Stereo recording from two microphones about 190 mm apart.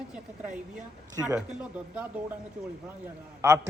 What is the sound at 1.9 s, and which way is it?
Speech, 10° right (ahead or behind).